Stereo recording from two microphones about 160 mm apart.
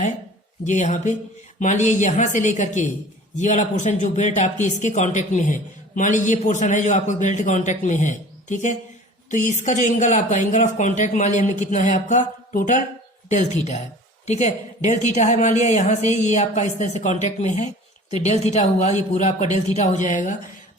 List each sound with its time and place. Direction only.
0.6 s speech: 50° left (ahead or behind)